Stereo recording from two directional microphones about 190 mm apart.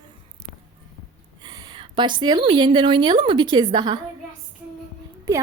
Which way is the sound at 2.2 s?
25° right (ahead or behind).